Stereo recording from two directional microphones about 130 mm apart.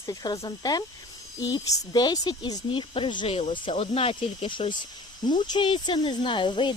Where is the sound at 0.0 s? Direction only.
30° left (ahead or behind).